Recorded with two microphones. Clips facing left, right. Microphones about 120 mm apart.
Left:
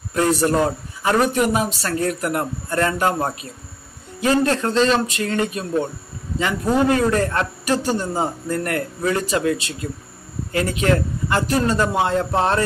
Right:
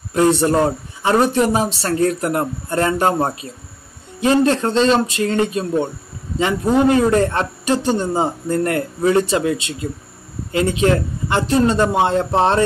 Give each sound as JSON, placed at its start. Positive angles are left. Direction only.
{"t": 0.1, "sound": "a man's voice", "side_deg": -25}